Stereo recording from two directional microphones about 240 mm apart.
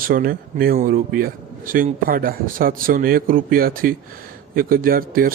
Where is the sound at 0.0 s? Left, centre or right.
Right.